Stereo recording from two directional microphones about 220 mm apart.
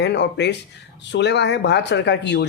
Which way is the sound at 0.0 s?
50° left (ahead or behind).